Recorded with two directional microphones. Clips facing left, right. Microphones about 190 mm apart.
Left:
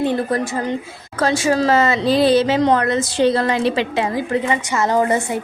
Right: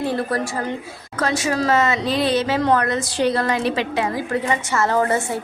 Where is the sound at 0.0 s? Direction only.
20° left (ahead or behind).